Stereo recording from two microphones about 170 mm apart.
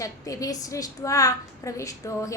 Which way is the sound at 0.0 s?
20° left (ahead or behind).